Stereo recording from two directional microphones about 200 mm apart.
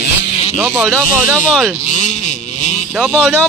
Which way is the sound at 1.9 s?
40° left (ahead or behind).